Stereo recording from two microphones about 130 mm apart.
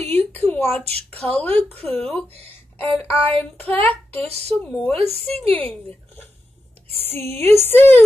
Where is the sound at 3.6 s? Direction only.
15° left (ahead or behind).